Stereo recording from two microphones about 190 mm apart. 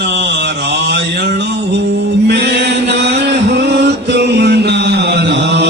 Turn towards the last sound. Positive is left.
turn(degrees=-65)  # may be behind; listen again after turning